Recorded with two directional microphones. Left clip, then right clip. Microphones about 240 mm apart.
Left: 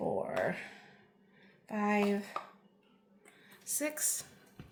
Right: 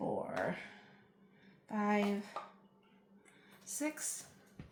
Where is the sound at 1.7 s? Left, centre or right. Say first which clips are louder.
Left 3 dB; left.